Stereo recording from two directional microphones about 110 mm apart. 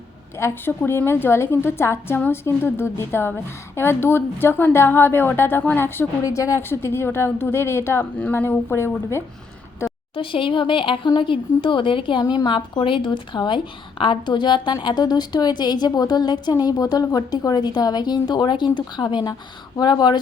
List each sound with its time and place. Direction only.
0.3 s a woman's voice: 25° left (ahead or behind)
10.2 s speech: 50° left (ahead or behind)
12.2 s a woman's voice: 35° left (ahead or behind)